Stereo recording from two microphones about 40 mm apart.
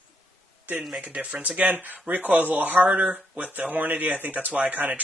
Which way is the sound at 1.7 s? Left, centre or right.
Right.